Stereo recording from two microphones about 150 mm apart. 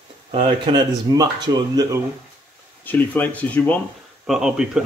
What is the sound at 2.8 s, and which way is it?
Speech, 10° left (ahead or behind).